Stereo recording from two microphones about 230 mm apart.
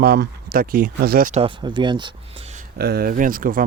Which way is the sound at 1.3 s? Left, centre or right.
Right.